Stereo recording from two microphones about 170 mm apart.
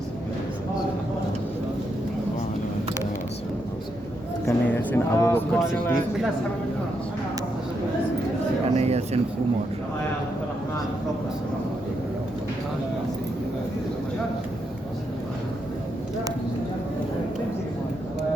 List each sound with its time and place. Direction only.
4.4 s a sound: 10° left (ahead or behind)
5.5 s speech: centre (ahead or behind)
8.7 s speech: 40° right (ahead or behind)